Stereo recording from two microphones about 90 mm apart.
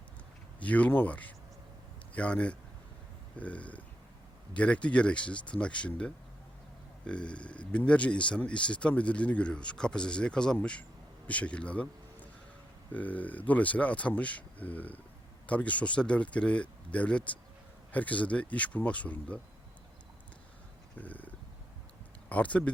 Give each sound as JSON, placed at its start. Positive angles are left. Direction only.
{"t": 0.6, "sound": "speech", "side_deg": 15}
{"t": 21.0, "sound": "a sound", "side_deg": 20}
{"t": 22.3, "sound": "speech", "side_deg": 15}